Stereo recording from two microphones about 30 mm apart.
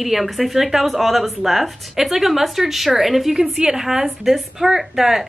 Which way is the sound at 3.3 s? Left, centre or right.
Right.